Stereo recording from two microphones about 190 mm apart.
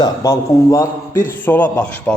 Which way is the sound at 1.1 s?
45° left (ahead or behind).